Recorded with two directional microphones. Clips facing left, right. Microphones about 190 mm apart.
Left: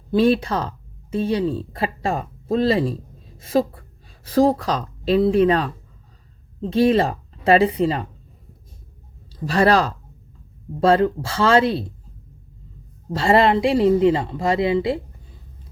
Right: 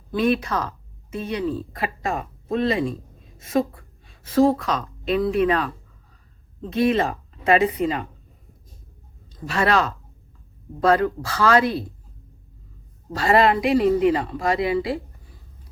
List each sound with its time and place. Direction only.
0.1 s speech: 30° left (ahead or behind)
9.5 s a woman's voice: 35° left (ahead or behind)
13.1 s a woman's voice: 25° left (ahead or behind)